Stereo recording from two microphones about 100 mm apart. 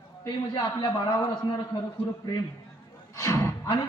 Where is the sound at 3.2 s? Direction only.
30° left (ahead or behind).